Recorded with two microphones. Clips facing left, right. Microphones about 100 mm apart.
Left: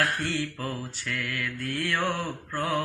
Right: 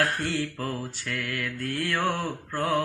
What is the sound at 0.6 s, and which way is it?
Mantra, 50° right (ahead or behind).